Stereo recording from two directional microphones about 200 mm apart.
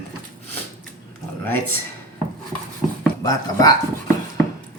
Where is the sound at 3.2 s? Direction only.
20° left (ahead or behind).